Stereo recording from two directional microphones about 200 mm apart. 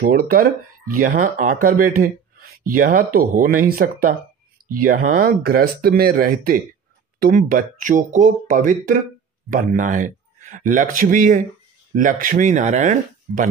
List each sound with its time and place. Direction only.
0.0 s speech: 45° right (ahead or behind)
4.7 s a man's voice: 45° right (ahead or behind)